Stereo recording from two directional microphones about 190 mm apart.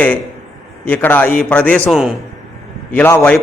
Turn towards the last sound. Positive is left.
turn(degrees=10)  # may be behind; listen again after turning